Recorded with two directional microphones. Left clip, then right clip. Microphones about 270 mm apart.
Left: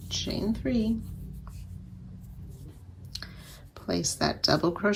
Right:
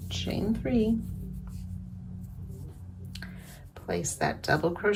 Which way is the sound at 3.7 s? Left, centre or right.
Left.